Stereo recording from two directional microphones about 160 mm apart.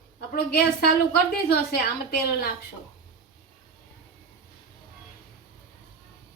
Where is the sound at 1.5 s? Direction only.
90° left.